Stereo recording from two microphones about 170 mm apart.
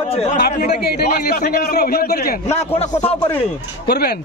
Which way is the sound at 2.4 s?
40° left (ahead or behind).